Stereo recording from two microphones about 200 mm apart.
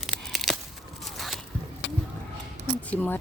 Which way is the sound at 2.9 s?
10° left (ahead or behind).